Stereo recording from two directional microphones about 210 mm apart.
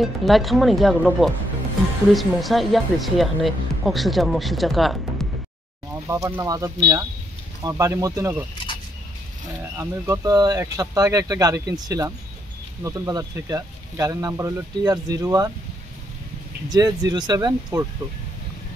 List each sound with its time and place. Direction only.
0.2 s speech: centre (ahead or behind)
6.0 s speech: 15° right (ahead or behind)
9.8 s speech: 15° right (ahead or behind)
16.6 s speech: 20° right (ahead or behind)